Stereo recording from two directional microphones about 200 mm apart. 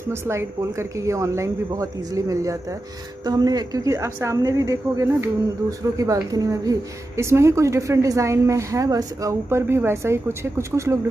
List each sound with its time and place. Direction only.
0.0 s a woman's voice: 15° right (ahead or behind)